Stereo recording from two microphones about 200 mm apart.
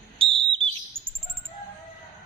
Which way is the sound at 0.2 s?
25° right (ahead or behind).